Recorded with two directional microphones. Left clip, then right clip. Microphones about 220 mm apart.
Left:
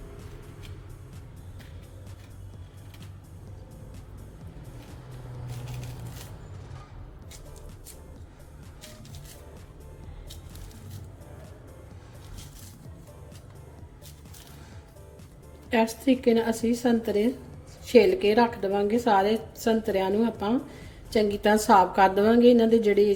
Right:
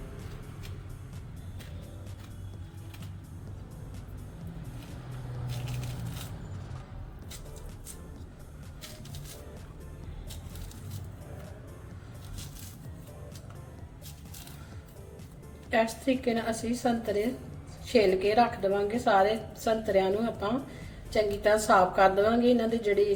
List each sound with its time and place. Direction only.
15.7 s a woman's voice: 45° left (ahead or behind)